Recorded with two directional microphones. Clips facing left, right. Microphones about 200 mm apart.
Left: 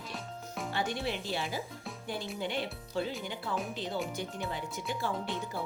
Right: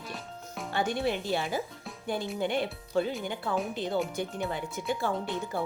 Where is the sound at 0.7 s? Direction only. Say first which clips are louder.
Right 6 dB; 50° right (ahead or behind).